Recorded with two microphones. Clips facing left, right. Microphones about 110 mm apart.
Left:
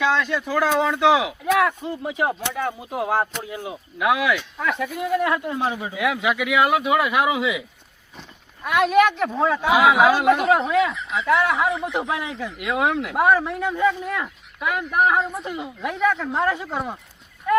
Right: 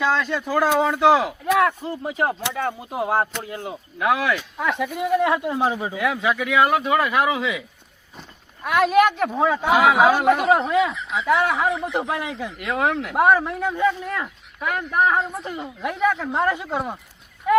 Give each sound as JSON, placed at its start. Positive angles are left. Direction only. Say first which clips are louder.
{"t": 0.0, "sound": "speech", "louder": "even", "side_deg": 0}
{"t": 3.3, "sound": "speech", "louder": "even", "side_deg": 10}
{"t": 5.2, "sound": "speech", "louder": "right 2 dB", "side_deg": -20}
{"t": 6.0, "sound": "speech", "louder": "left 1 dB", "side_deg": 5}
{"t": 8.6, "sound": "speech", "louder": "even", "side_deg": 0}